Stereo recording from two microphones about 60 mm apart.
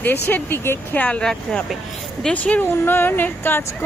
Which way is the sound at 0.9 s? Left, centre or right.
Left.